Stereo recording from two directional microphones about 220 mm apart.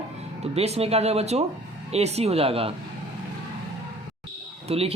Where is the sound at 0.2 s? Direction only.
30° right (ahead or behind).